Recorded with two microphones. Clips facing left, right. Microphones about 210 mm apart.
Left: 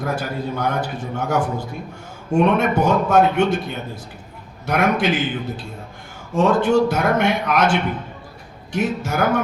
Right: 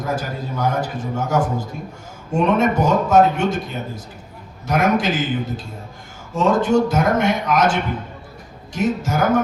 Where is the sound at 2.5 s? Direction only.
65° left (ahead or behind).